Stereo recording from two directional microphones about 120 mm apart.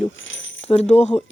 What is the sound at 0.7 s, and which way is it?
Speech, 65° left (ahead or behind).